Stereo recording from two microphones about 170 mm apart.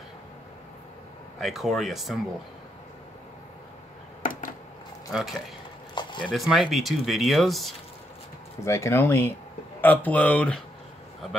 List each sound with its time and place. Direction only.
1.4 s speech: centre (ahead or behind)
4.2 s a sound: 55° left (ahead or behind)
5.1 s speech: centre (ahead or behind)
8.6 s speech: 15° left (ahead or behind)